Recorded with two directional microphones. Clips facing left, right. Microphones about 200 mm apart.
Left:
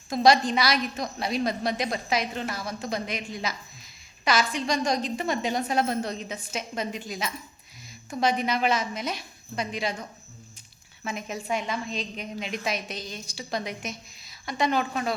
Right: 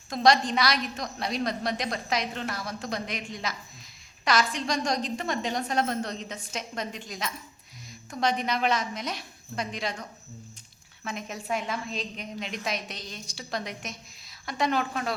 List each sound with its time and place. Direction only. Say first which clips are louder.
0.1 s a woman's voice: left 2 dB; 5° left (ahead or behind)
4.5 s a woman's voice: left 2 dB; centre (ahead or behind)